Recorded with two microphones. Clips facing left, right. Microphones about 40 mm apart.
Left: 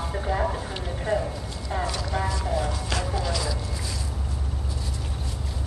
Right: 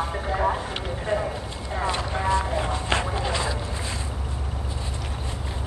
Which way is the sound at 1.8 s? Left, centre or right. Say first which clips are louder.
Right 5 dB; right.